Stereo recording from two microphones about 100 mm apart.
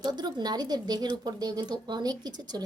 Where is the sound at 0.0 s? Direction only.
45° right (ahead or behind).